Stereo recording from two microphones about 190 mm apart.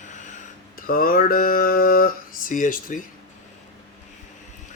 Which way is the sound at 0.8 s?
50° left (ahead or behind).